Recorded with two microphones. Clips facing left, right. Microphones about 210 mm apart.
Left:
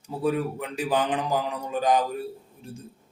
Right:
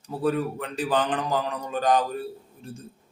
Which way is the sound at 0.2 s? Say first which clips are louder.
Even; 10° left (ahead or behind).